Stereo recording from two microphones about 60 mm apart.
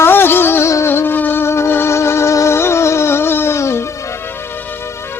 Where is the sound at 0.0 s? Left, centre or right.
Left.